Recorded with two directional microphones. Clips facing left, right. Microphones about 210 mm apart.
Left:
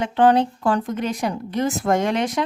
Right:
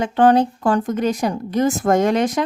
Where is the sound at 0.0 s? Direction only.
45° right (ahead or behind).